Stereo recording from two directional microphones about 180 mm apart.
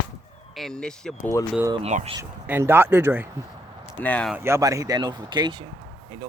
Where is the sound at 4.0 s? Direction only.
5° left (ahead or behind).